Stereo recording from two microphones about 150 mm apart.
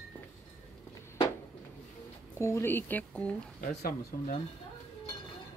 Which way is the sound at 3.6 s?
70° left (ahead or behind).